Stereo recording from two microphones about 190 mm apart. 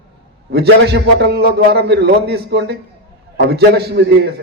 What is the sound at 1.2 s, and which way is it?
A man's voice, 60° right (ahead or behind).